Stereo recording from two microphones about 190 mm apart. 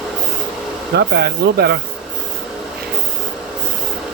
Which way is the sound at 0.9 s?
55° right (ahead or behind).